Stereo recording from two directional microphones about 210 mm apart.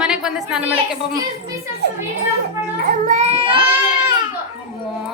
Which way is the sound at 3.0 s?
35° right (ahead or behind).